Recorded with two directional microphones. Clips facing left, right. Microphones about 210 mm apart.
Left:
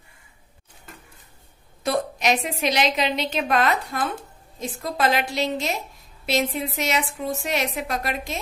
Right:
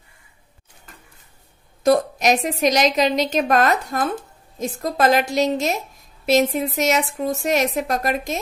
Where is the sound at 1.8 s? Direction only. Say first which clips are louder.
Right 6 dB; 40° right (ahead or behind).